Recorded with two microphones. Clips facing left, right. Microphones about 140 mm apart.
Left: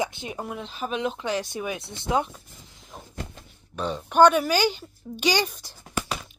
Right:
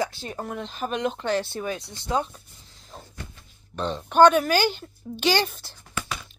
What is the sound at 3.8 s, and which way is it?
Speech, 5° left (ahead or behind).